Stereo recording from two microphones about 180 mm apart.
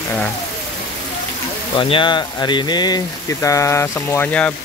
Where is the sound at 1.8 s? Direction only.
25° left (ahead or behind).